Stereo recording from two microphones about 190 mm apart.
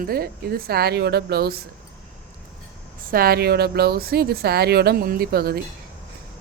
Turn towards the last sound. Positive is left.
turn(degrees=-55)  # may be behind; listen again after turning